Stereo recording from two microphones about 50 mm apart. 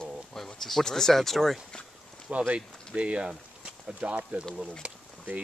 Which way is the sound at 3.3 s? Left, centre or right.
Centre.